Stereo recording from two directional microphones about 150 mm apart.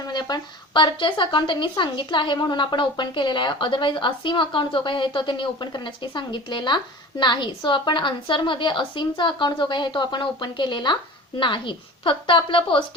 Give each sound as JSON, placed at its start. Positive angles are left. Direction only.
{"t": 0.1, "sound": "a woman's voice", "side_deg": 30}